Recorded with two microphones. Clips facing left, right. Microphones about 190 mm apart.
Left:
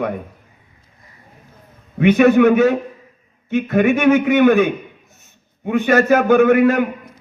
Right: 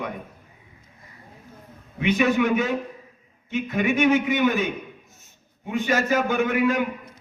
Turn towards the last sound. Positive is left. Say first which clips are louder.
# left 9 dB
turn(degrees=55)  # may be behind; listen again after turning